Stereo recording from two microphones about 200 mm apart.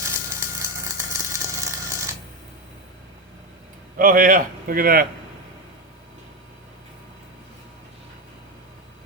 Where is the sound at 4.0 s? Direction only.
45° right (ahead or behind).